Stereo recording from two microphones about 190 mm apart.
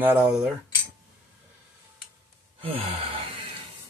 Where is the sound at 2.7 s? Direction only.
30° right (ahead or behind).